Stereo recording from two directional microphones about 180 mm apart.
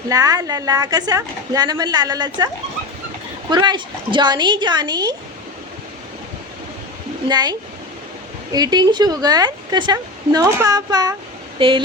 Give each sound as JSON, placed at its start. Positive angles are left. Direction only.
{"t": 0.1, "sound": "a woman's voice", "side_deg": -20}
{"t": 3.5, "sound": "a woman's voice", "side_deg": -25}
{"t": 7.3, "sound": "a woman's voice", "side_deg": -25}
{"t": 8.5, "sound": "a woman's voice", "side_deg": -20}
{"t": 11.6, "sound": "a sound", "side_deg": -30}